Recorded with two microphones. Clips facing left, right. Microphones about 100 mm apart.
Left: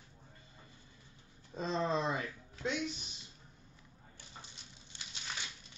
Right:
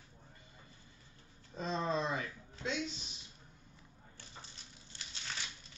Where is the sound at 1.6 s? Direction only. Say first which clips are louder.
Left 2 dB; 30° left (ahead or behind).